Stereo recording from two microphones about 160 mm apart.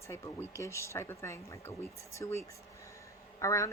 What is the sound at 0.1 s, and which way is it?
Speech, 15° left (ahead or behind).